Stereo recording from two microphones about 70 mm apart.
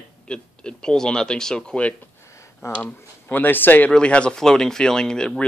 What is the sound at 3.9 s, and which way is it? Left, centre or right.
Speech, centre.